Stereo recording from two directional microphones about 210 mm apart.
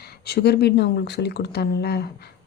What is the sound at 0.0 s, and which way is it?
Speech, 50° left (ahead or behind).